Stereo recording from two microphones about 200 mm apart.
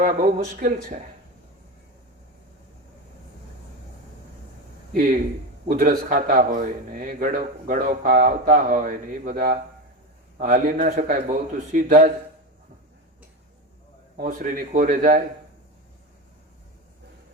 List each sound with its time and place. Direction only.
0.0 s a man's voice: 40° right (ahead or behind)
5.6 s a man's voice: 45° right (ahead or behind)
14.2 s a man's voice: 45° right (ahead or behind)